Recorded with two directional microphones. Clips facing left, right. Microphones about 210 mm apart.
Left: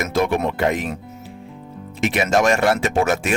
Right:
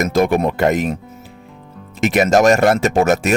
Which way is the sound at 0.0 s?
45° right (ahead or behind).